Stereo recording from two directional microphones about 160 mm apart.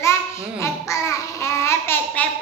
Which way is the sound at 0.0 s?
15° left (ahead or behind).